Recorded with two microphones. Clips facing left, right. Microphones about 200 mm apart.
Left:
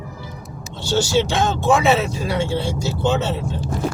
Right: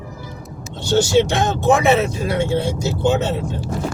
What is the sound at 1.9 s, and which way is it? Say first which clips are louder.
Speech: right 2 dB; 55° right (ahead or behind).